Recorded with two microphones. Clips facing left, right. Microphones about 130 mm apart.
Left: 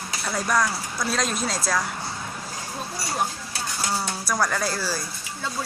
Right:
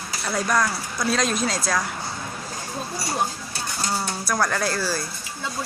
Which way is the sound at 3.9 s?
5° left (ahead or behind).